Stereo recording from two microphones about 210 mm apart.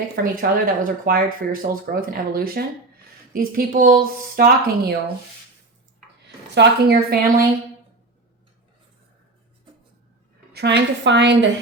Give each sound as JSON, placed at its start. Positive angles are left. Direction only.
{"t": 0.2, "sound": "speech", "side_deg": -40}
{"t": 6.2, "sound": "speech", "side_deg": -55}
{"t": 10.5, "sound": "a woman's voice", "side_deg": -55}